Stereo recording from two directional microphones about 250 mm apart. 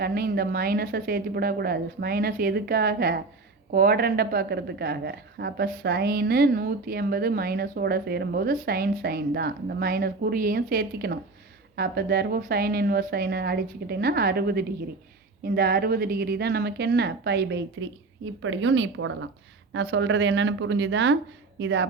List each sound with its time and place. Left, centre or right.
0.0 s speech: right